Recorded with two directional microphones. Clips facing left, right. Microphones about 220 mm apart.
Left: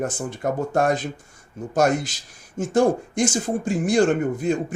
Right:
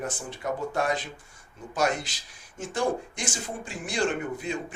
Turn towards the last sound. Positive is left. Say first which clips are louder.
# left 9 dB
turn(degrees=45)  # may be behind; listen again after turning